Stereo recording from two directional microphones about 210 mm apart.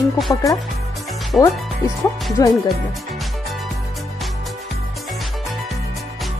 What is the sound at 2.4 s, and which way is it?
Speech, 15° left (ahead or behind).